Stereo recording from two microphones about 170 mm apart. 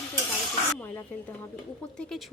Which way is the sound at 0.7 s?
15° left (ahead or behind).